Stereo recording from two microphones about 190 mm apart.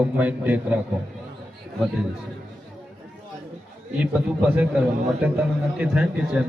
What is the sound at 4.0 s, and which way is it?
Speech, 5° right (ahead or behind).